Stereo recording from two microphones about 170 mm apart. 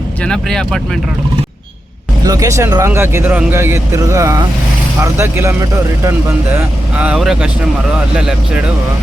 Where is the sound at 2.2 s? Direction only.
20° right (ahead or behind); by 8.7 s 5° right (ahead or behind).